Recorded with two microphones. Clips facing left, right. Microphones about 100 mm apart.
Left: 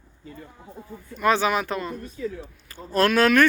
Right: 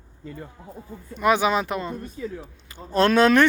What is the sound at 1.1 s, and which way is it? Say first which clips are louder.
Speech: right 1 dB; 15° right (ahead or behind).